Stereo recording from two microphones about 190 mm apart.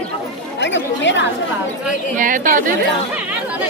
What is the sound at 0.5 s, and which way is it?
Speech, 70° left (ahead or behind).